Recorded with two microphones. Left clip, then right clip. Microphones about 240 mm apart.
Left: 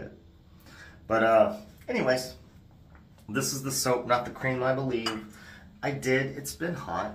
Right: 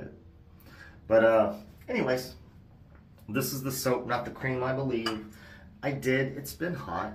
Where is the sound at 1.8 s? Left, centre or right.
Centre.